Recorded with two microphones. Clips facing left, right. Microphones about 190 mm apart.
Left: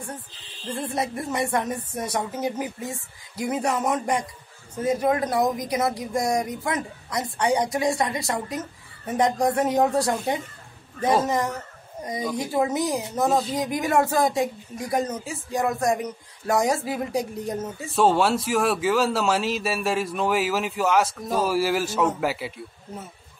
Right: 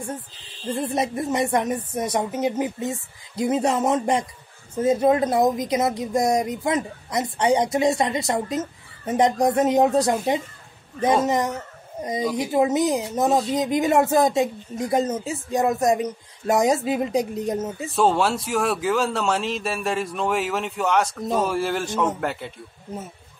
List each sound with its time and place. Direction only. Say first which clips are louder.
0.7 s a woman's voice: right 3 dB; 20° right (ahead or behind)
13.3 s speech: right 3 dB; centre (ahead or behind)
13.6 s a woman's voice: right 3 dB; 20° right (ahead or behind)
17.8 s speech: left 1 dB; centre (ahead or behind)